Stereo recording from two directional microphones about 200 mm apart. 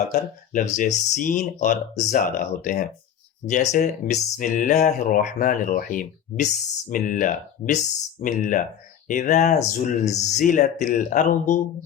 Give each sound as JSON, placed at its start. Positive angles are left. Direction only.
{"t": 0.1, "sound": "speech", "side_deg": 40}